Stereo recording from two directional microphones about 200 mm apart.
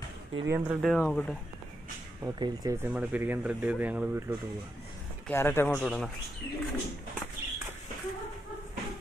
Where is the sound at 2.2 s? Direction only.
15° right (ahead or behind).